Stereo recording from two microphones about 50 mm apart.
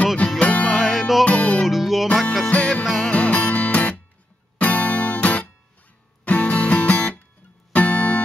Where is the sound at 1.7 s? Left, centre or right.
Centre.